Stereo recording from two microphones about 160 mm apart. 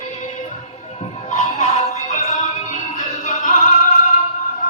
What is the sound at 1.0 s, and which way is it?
Music, 35° left (ahead or behind).